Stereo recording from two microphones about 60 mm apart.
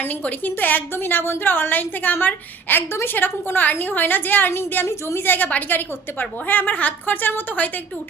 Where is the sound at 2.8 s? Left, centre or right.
Left.